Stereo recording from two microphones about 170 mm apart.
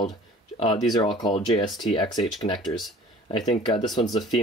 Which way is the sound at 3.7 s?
25° left (ahead or behind).